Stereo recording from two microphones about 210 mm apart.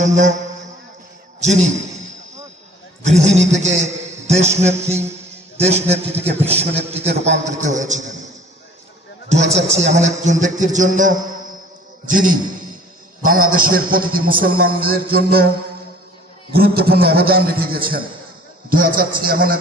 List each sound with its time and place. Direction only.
0.0 s a man's voice: 35° right (ahead or behind)
3.0 s a man's voice: 35° right (ahead or behind)
9.3 s a man's voice: 30° right (ahead or behind)
16.5 s a man's voice: 45° right (ahead or behind)